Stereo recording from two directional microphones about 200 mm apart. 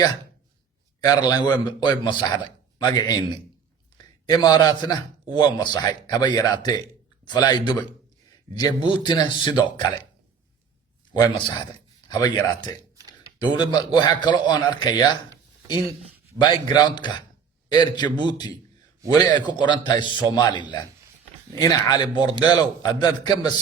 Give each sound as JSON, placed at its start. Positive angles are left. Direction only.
{"t": 1.0, "sound": "a man's voice", "side_deg": 20}
{"t": 11.1, "sound": "a man's voice", "side_deg": 20}
{"t": 13.4, "sound": "a man's voice", "side_deg": 20}
{"t": 16.4, "sound": "a man's voice", "side_deg": 20}